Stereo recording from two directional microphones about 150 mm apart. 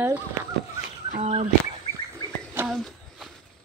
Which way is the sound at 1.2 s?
40° right (ahead or behind).